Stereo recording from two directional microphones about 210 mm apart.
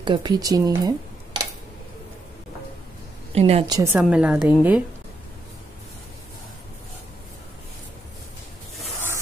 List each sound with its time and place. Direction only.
0.0 s speech: 20° right (ahead or behind)
3.3 s a woman's voice: 30° right (ahead or behind)
3.6 s a woman's voice: 15° right (ahead or behind)